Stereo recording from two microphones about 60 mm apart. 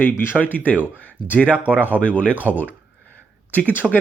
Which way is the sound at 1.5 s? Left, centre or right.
Right.